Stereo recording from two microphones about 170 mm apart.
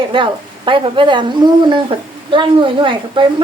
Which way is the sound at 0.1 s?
30° right (ahead or behind).